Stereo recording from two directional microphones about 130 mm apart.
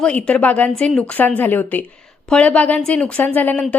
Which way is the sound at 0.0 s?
10° left (ahead or behind).